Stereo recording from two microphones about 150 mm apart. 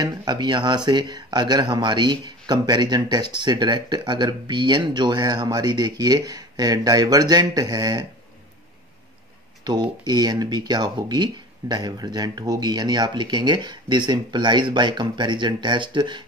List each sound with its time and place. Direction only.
0.0 s speech: 30° right (ahead or behind)
9.7 s speech: 30° right (ahead or behind)